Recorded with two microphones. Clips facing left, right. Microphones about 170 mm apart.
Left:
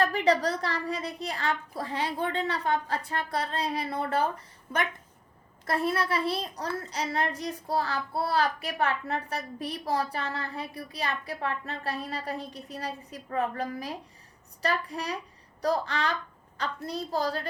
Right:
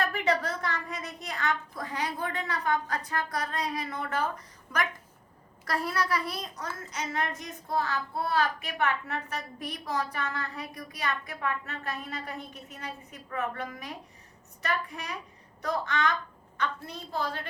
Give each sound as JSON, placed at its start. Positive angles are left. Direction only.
{"t": 0.0, "sound": "a woman's voice", "side_deg": 35}